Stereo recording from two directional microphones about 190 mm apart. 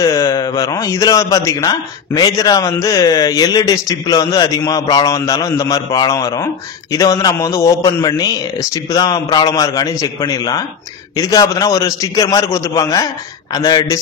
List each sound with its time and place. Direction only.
0.0 s a man's voice: 15° left (ahead or behind)